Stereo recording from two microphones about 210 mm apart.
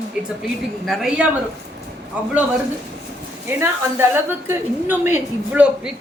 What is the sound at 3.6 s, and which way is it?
A woman's voice, 10° right (ahead or behind).